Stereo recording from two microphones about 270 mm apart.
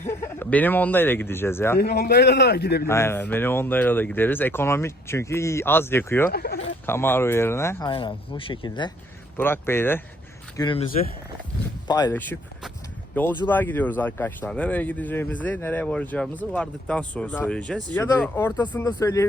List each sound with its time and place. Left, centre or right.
0.1 s speech: centre
1.8 s a man's voice: left
2.8 s speech: centre
6.3 s a man's voice: left
6.8 s speech: centre
11.9 s speech: centre